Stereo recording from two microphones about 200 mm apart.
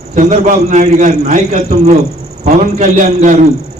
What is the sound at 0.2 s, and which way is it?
A man's voice, 35° right (ahead or behind).